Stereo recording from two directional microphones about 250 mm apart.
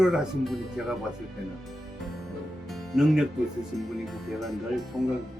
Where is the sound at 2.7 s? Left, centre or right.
Centre.